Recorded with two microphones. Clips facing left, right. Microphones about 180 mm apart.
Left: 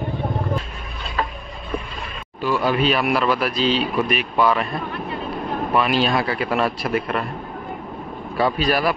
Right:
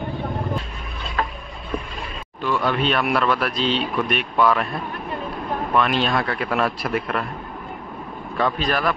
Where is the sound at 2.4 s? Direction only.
5° left (ahead or behind).